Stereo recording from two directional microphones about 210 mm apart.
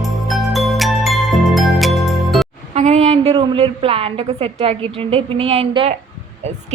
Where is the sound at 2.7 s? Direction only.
30° right (ahead or behind).